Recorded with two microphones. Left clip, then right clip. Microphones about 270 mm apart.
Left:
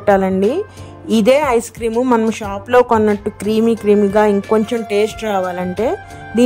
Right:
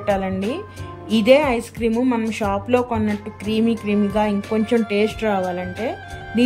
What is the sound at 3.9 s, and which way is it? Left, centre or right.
Speech, left.